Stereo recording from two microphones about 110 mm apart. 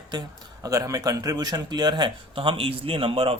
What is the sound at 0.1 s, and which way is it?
Speech, 40° right (ahead or behind).